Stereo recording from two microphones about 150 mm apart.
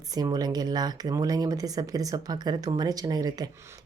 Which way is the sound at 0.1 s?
25° right (ahead or behind).